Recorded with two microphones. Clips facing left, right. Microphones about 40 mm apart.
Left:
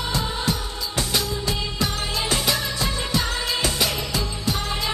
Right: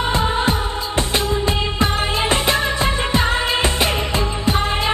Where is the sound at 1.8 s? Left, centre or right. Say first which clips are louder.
Right 7 dB; right.